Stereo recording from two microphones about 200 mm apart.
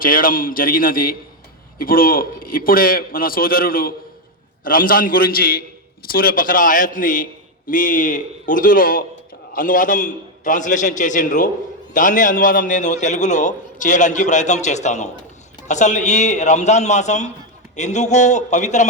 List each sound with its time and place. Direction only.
0.0 s a man's voice: 45° left (ahead or behind)